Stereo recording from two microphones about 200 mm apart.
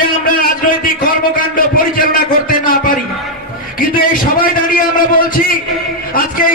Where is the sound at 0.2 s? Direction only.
45° left (ahead or behind).